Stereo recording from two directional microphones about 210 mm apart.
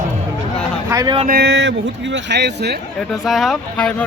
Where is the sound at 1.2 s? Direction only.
50° right (ahead or behind).